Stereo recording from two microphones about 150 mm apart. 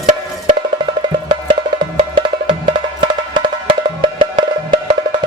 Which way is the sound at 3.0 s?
30° right (ahead or behind).